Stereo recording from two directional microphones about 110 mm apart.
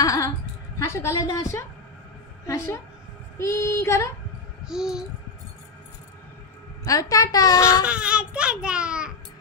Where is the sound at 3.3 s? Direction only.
25° left (ahead or behind).